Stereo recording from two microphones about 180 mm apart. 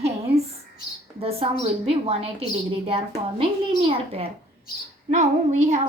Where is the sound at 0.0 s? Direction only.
35° right (ahead or behind).